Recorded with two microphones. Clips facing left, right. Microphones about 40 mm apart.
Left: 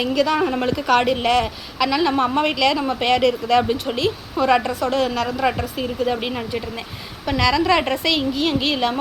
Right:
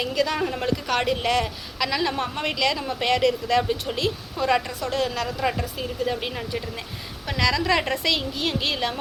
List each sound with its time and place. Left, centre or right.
0.0 s a woman's voice: left
3.6 s a woman's voice: left